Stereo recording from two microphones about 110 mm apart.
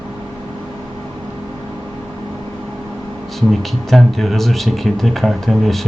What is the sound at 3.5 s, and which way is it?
Speech, centre (ahead or behind).